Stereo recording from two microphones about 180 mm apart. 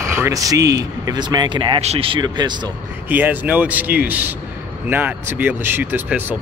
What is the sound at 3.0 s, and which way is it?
Speech, 10° right (ahead or behind).